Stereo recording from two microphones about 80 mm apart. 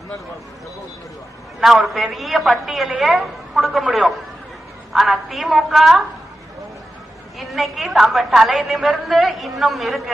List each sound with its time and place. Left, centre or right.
1.6 s a woman's voice: centre
4.9 s a woman's voice: centre
7.3 s a woman's voice: centre